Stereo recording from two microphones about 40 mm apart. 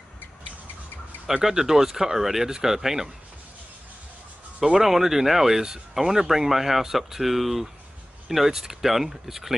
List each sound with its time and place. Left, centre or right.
1.4 s speech: centre
4.7 s speech: centre